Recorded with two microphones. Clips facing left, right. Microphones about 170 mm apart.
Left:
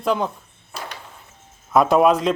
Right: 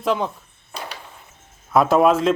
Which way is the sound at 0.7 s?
5° left (ahead or behind).